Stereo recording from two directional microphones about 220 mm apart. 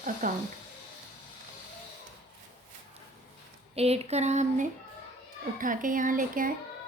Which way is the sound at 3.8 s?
30° right (ahead or behind).